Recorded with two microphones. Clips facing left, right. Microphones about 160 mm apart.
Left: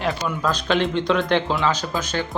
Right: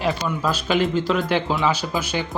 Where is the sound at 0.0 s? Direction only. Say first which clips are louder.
Right 1 dB; centre (ahead or behind).